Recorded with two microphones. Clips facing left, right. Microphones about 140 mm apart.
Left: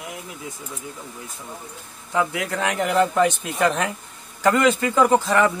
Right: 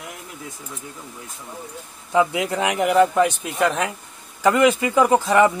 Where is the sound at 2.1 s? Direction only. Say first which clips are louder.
Right 4 dB; 20° right (ahead or behind).